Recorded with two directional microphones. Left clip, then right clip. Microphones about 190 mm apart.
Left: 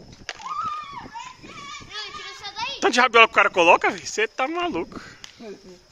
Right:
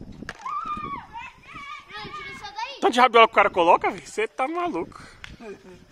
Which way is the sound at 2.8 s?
15° right (ahead or behind).